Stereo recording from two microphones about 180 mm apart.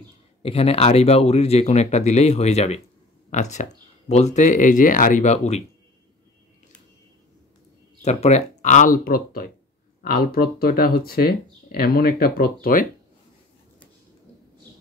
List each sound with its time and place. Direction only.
0.4 s speech: 35° left (ahead or behind)
8.0 s speech: 40° left (ahead or behind); by 12.5 s 55° left (ahead or behind)